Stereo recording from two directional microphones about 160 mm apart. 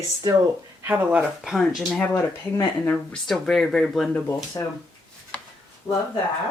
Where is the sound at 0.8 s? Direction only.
5° right (ahead or behind).